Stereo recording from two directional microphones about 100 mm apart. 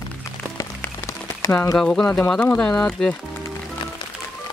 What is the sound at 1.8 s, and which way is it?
Speech, 10° left (ahead or behind).